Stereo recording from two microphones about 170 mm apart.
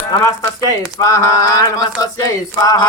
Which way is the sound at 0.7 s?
20° left (ahead or behind).